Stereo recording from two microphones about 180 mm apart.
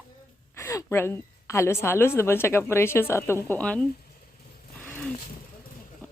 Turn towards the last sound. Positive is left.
turn(degrees=10)  # may be behind; listen again after turning